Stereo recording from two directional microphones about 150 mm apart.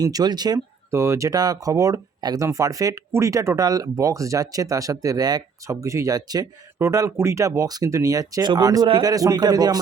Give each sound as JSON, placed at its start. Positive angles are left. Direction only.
{"t": 0.0, "sound": "speech", "side_deg": -25}